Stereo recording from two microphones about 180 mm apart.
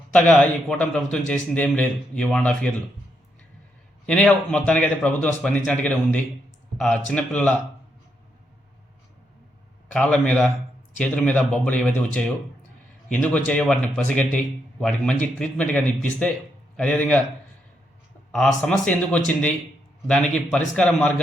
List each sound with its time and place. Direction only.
0.1 s speech: 5° left (ahead or behind)
4.0 s speech: 5° left (ahead or behind)
9.9 s a man's voice: 5° left (ahead or behind)
18.3 s a man's voice: 5° left (ahead or behind)